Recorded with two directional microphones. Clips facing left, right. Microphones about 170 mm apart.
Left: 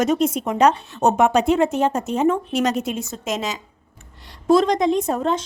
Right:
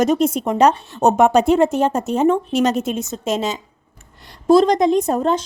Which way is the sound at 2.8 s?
25° right (ahead or behind).